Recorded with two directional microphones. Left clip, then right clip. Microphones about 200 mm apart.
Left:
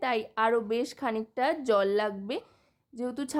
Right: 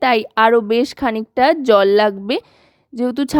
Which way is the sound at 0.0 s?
40° right (ahead or behind).